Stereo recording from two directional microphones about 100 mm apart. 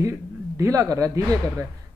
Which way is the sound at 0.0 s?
30° right (ahead or behind).